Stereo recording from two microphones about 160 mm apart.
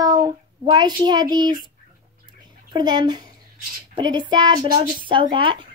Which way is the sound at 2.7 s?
25° right (ahead or behind).